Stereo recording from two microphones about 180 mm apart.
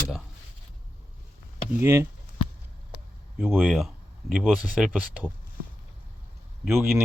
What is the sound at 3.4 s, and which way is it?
Speech, 10° right (ahead or behind).